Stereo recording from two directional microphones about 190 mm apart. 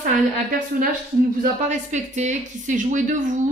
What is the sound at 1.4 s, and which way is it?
A woman's voice, 40° right (ahead or behind).